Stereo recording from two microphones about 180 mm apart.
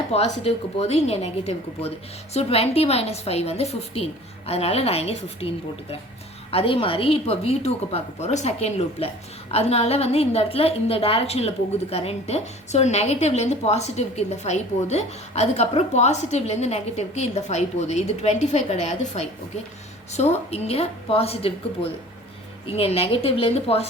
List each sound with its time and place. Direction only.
0.1 s a woman's voice: 35° left (ahead or behind)
6.5 s a woman's voice: 30° left (ahead or behind)
22.6 s a woman's voice: 30° left (ahead or behind)